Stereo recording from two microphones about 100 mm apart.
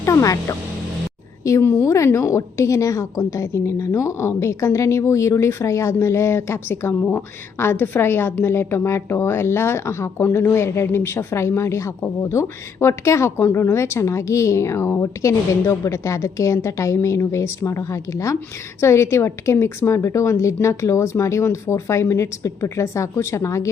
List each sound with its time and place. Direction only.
0.0 s a woman's voice: 30° left (ahead or behind)